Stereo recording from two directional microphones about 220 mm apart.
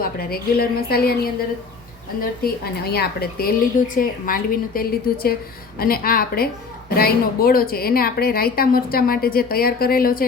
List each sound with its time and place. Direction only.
0.0 s a woman's voice: 45° left (ahead or behind)
2.9 s a woman's voice: 45° left (ahead or behind)